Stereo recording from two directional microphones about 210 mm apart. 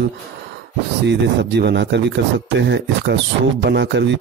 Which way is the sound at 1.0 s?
55° right (ahead or behind).